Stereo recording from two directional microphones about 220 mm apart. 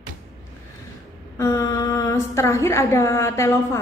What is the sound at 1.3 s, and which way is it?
Mantra, 15° left (ahead or behind).